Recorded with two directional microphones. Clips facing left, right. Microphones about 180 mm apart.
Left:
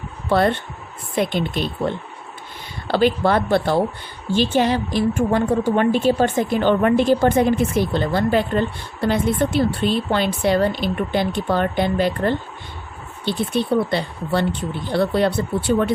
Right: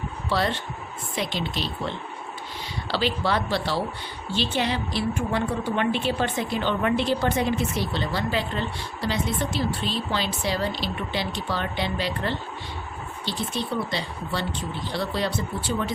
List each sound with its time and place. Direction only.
0.3 s a woman's voice: 55° left (ahead or behind)